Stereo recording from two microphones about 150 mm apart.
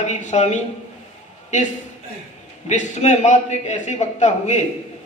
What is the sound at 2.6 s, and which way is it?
A man's voice, 50° left (ahead or behind).